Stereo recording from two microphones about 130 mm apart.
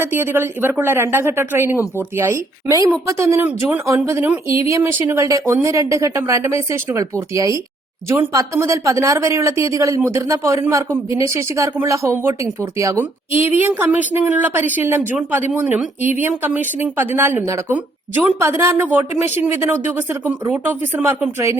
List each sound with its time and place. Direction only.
0.0 s speech: 15° right (ahead or behind)